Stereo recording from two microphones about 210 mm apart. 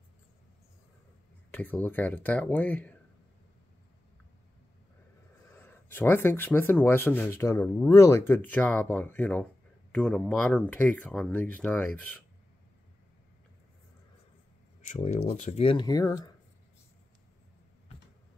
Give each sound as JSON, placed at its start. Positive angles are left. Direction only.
{"t": 1.5, "sound": "speech", "side_deg": 10}
{"t": 5.5, "sound": "speech", "side_deg": 10}
{"t": 14.8, "sound": "speech", "side_deg": 35}